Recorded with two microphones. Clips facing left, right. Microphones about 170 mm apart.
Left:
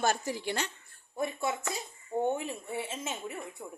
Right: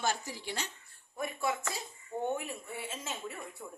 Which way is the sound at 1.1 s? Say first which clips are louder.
Left 2 dB; 25° left (ahead or behind).